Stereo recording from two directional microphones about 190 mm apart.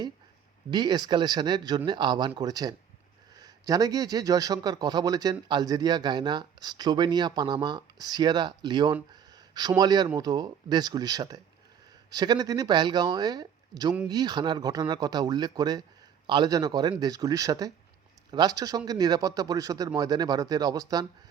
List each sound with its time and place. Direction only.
0.7 s a man's voice: 20° right (ahead or behind)